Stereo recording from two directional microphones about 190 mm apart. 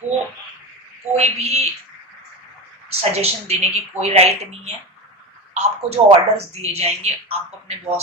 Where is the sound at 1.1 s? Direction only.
35° right (ahead or behind).